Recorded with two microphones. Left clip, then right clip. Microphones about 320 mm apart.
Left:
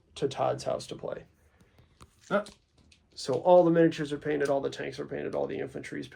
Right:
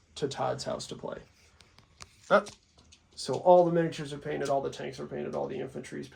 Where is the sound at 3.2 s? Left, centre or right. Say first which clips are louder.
Even; left.